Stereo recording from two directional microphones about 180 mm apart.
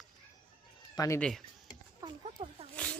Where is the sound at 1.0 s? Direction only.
15° left (ahead or behind).